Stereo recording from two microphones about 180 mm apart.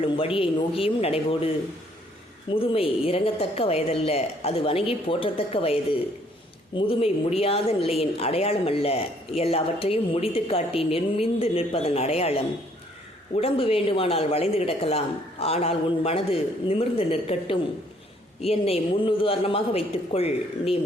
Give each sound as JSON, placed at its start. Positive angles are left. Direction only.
{"t": 0.0, "sound": "a woman's voice", "side_deg": 30}
{"t": 2.6, "sound": "a woman's voice", "side_deg": 30}